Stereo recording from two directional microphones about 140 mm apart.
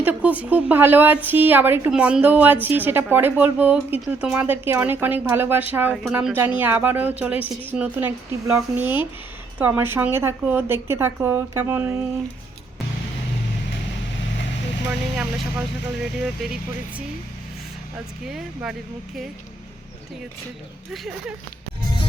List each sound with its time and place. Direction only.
0.0 s a woman's voice: 10° right (ahead or behind)
15.1 s a woman's voice: 5° right (ahead or behind)
18.3 s speech: 5° right (ahead or behind)
20.9 s speech: centre (ahead or behind)